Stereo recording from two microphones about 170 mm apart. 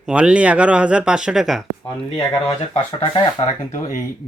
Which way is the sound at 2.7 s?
30° left (ahead or behind).